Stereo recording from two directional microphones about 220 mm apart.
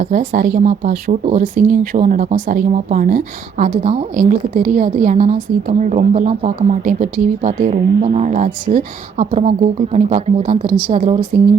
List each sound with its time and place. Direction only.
0.0 s speech: 40° right (ahead or behind)